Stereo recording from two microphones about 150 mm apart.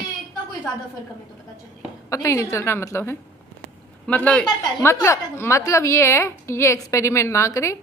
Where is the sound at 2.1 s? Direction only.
20° left (ahead or behind).